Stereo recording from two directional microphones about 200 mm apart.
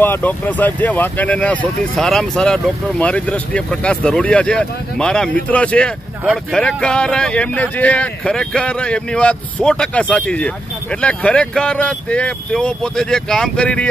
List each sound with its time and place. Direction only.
0.0 s speech: 10° left (ahead or behind)